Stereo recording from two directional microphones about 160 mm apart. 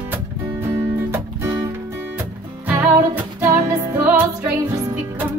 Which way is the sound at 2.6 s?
10° right (ahead or behind).